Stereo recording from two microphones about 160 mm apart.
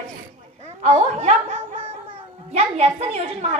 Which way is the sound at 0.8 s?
40° right (ahead or behind).